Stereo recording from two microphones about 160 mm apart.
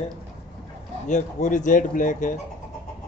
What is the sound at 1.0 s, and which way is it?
Speech, 50° left (ahead or behind).